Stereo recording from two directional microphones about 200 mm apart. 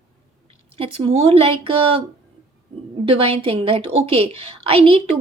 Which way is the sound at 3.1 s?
30° right (ahead or behind).